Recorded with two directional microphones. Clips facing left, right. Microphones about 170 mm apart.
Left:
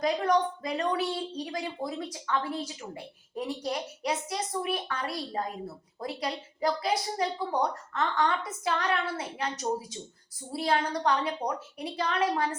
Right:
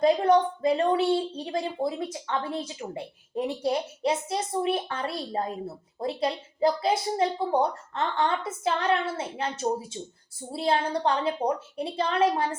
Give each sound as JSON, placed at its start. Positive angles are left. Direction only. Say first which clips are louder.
{"t": 0.0, "sound": "a woman's voice", "louder": "right 5 dB", "side_deg": -30}